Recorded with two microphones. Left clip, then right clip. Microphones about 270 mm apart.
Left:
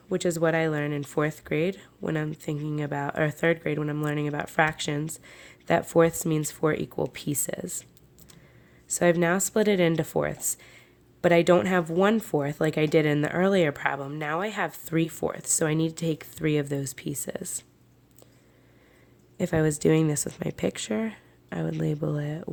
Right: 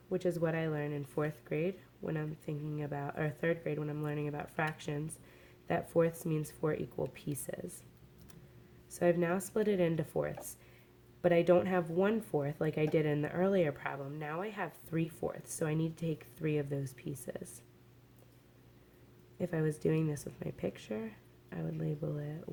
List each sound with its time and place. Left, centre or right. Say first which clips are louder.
0.1 s speech: left 9 dB; left
8.9 s speech: left 9 dB; left
19.4 s speech: left 10 dB; left